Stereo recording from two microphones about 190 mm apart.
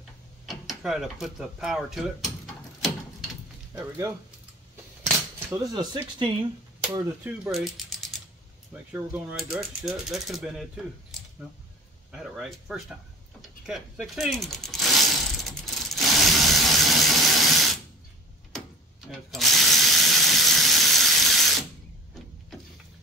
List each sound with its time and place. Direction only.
0.5 s tick-tock: centre (ahead or behind)
1.2 s mechanisms: centre (ahead or behind)
5.0 s speech: 15° right (ahead or behind)
6.9 s speech: 10° right (ahead or behind)
8.9 s mechanisms: 5° right (ahead or behind)
12.1 s mechanisms: 5° right (ahead or behind)
19.0 s ratchet: centre (ahead or behind)